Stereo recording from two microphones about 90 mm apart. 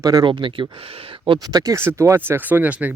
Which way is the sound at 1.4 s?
40° right (ahead or behind).